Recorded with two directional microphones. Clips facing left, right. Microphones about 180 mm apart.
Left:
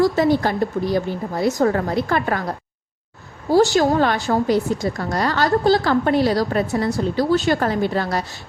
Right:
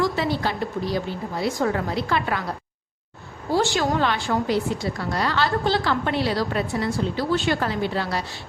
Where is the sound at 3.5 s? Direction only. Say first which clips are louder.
Left 7 dB; 40° left (ahead or behind).